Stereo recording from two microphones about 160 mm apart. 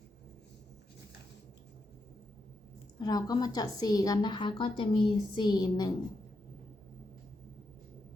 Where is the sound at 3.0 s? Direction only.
25° left (ahead or behind).